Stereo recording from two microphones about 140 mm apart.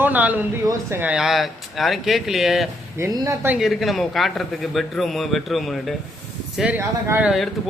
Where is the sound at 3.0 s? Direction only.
25° right (ahead or behind).